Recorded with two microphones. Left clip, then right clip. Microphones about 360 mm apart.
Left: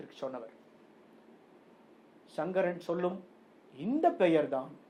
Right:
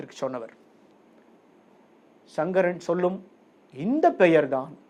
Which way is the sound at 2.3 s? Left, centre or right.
Right.